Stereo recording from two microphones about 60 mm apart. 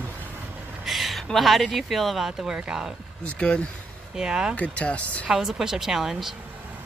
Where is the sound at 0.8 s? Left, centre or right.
Centre.